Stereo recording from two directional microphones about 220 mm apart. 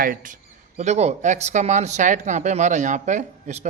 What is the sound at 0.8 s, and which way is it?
Speech, 30° right (ahead or behind).